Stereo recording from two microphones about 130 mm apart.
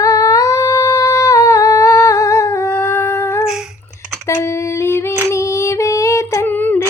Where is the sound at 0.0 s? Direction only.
30° left (ahead or behind).